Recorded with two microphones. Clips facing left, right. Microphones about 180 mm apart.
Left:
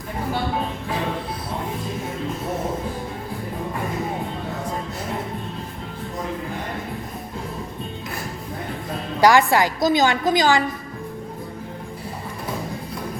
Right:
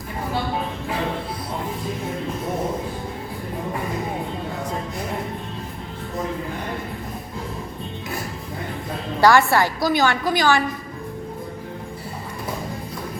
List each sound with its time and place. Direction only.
9.2 s a woman's voice: 15° left (ahead or behind)